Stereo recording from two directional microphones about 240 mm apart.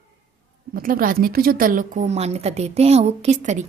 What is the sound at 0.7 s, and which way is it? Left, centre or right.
Speech, right.